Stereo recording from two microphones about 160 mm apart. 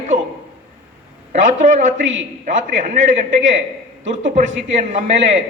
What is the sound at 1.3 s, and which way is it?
A man's voice, 55° right (ahead or behind).